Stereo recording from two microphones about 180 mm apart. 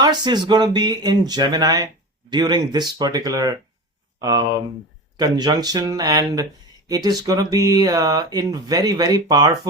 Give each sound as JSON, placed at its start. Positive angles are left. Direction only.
{"t": 0.0, "sound": "speech", "side_deg": -25}